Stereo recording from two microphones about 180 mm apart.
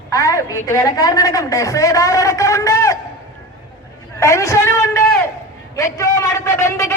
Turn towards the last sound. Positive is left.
turn(degrees=15)  # may be behind; listen again after turning